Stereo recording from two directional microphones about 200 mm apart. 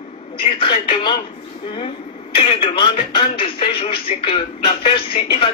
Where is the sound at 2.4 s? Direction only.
25° left (ahead or behind).